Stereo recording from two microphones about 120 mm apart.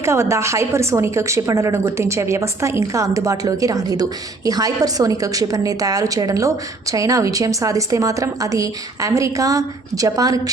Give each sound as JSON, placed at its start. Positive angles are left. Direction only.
{"t": 0.0, "sound": "a woman's voice", "side_deg": -25}